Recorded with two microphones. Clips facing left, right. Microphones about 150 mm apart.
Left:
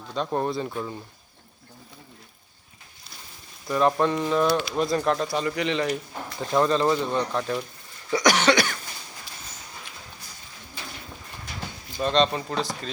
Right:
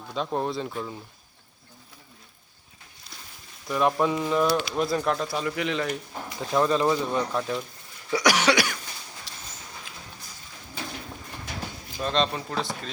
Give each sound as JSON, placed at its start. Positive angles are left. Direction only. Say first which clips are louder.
{"t": 0.1, "sound": "speech", "louder": "left 2 dB", "side_deg": 0}
{"t": 3.7, "sound": "speech", "louder": "left 2 dB", "side_deg": 0}
{"t": 8.1, "sound": "cough", "louder": "left 2 dB", "side_deg": -10}
{"t": 9.3, "sound": "a sound", "louder": "left 1 dB", "side_deg": -90}
{"t": 11.9, "sound": "speech", "louder": "left 4 dB", "side_deg": 0}